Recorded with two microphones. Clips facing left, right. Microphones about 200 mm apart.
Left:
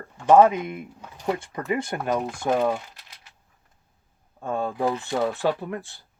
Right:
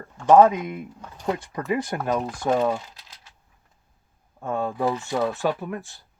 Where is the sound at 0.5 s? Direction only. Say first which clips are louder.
Even; 25° left (ahead or behind).